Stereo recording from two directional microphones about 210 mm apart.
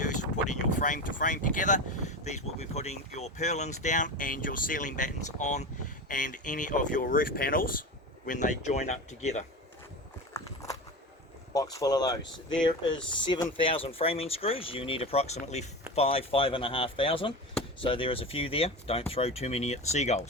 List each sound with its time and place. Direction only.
0.0 s a sound: 35° left (ahead or behind)
2.0 s speech: 35° left (ahead or behind)
10.3 s walk: 15° left (ahead or behind)
11.5 s speech: 15° left (ahead or behind); by 20.2 s 30° left (ahead or behind)